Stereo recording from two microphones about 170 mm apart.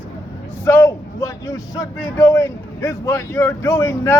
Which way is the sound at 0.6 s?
15° left (ahead or behind).